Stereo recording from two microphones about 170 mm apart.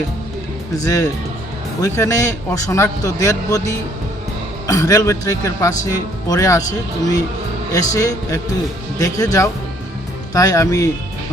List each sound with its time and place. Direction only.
0.8 s speech: 20° left (ahead or behind)
7.7 s speech: 20° left (ahead or behind)